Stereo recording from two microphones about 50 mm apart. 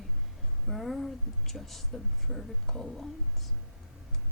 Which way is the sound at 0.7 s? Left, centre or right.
Centre.